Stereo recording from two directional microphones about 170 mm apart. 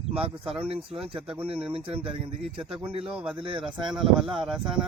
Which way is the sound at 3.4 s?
30° right (ahead or behind).